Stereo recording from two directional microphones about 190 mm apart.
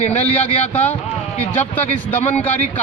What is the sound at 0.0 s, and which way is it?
Speech, 35° left (ahead or behind).